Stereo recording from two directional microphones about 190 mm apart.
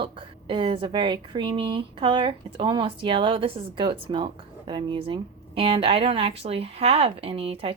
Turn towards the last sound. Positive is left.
turn(degrees=-30)  # may be behind; listen again after turning